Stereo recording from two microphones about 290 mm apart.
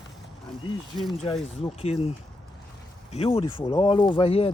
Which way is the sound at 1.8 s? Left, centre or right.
Left.